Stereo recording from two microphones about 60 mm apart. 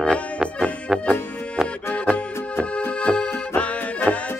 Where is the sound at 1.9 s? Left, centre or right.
Centre.